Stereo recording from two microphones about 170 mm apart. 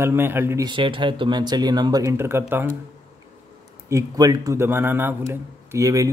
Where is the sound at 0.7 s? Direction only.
30° right (ahead or behind); by 2.7 s 15° right (ahead or behind).